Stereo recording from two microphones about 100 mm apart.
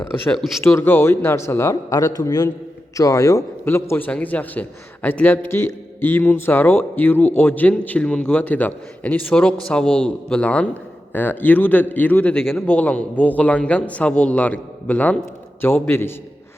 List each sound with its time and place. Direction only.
0.6 s a man's voice: 20° left (ahead or behind)